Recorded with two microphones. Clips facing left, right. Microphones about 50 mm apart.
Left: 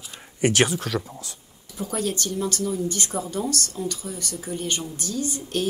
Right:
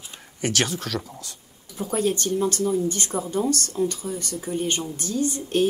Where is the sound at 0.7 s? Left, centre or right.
Centre.